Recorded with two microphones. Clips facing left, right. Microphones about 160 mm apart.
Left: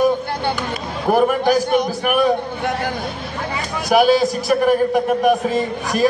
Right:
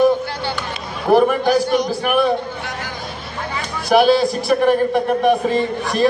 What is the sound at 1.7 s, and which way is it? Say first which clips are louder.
Speech: even; 55° left (ahead or behind).